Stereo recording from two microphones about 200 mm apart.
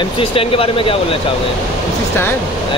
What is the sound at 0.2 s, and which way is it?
Speech, 25° left (ahead or behind).